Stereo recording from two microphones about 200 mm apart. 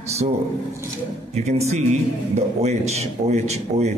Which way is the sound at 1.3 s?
35° right (ahead or behind).